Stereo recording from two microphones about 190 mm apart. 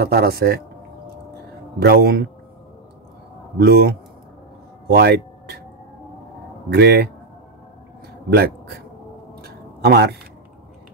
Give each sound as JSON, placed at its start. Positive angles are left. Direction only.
{"t": 0.0, "sound": "speech", "side_deg": -55}
{"t": 1.8, "sound": "speech", "side_deg": -55}
{"t": 3.5, "sound": "speech", "side_deg": -55}
{"t": 4.8, "sound": "a sound", "side_deg": -55}
{"t": 6.7, "sound": "speech", "side_deg": -60}
{"t": 9.4, "sound": "a sound", "side_deg": -55}